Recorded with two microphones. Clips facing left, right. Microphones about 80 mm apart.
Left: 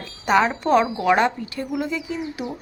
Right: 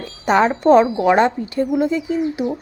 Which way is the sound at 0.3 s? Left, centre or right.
Right.